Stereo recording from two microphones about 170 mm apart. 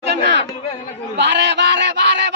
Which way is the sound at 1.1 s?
90° right.